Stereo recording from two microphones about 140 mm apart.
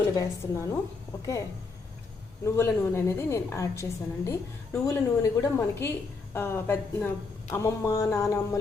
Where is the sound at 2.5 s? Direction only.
15° left (ahead or behind).